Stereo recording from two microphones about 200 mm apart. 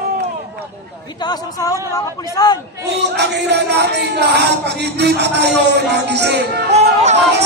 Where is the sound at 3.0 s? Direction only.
55° right (ahead or behind).